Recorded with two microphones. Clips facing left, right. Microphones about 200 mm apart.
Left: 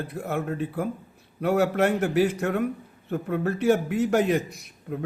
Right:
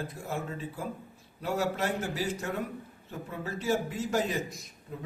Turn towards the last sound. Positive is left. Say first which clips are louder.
# left 8 dB
turn(degrees=65)  # may be behind; listen again after turning